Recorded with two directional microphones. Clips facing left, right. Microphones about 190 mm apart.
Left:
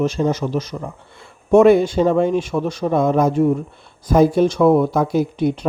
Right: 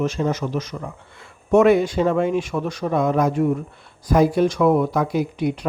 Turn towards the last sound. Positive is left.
turn(degrees=25)  # may be behind; listen again after turning